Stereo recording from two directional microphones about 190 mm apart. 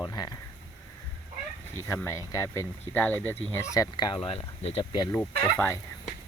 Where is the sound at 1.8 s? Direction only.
15° left (ahead or behind).